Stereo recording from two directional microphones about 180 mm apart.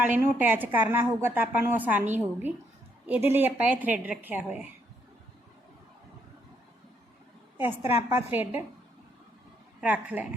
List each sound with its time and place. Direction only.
0.0 s a woman's voice: 10° right (ahead or behind)
7.6 s a woman's voice: 10° right (ahead or behind)
9.8 s a woman's voice: 10° right (ahead or behind)